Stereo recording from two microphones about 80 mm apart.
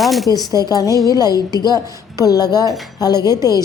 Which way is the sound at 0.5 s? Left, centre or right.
Left.